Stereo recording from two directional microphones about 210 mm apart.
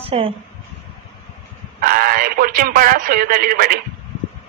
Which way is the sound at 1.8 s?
45° right (ahead or behind).